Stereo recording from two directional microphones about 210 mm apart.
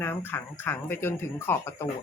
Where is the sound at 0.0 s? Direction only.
10° left (ahead or behind).